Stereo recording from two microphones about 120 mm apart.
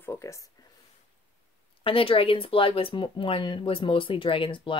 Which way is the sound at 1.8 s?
50° left (ahead or behind).